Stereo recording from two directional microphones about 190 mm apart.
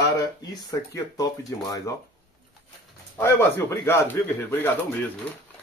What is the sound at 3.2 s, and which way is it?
Speech, 15° left (ahead or behind).